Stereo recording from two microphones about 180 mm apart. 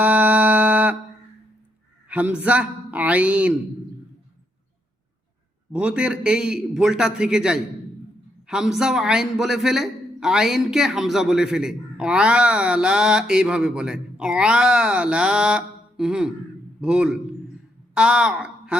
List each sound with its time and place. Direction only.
0.0 s a sound: 10° right (ahead or behind)
2.0 s a man's voice: 10° right (ahead or behind)
5.7 s a man's voice: 5° right (ahead or behind)